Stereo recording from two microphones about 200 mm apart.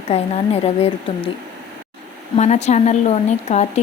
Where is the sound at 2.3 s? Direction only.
35° left (ahead or behind).